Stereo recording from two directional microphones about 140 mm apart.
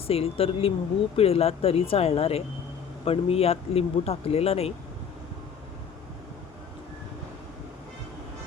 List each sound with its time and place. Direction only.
0.1 s speech: 45° left (ahead or behind)